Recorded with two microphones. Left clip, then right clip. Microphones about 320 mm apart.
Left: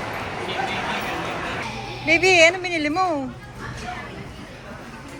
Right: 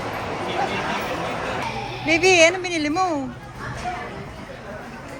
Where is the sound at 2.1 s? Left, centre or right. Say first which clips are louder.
Even; centre.